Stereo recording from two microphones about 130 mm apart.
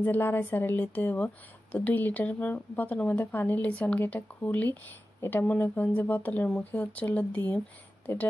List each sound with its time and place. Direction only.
0.0 s a woman's voice: 15° left (ahead or behind)